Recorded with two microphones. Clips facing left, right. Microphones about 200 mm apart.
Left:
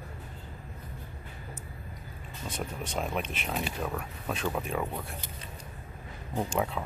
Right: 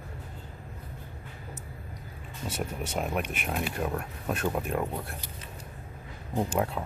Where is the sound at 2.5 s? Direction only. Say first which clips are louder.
Right 3 dB; 5° right (ahead or behind).